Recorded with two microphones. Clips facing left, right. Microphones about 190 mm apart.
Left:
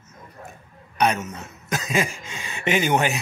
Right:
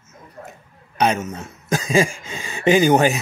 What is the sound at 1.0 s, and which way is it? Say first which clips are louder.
A man's voice: right 2 dB; 25° right (ahead or behind).